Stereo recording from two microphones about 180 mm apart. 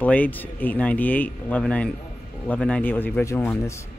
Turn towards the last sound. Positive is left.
turn(degrees=15)  # may be behind; listen again after turning